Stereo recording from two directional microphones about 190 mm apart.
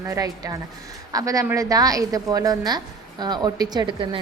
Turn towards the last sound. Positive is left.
turn(degrees=-25)  # may be behind; listen again after turning